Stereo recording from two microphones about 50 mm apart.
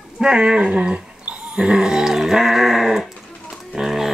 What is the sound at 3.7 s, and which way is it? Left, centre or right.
Bird, centre.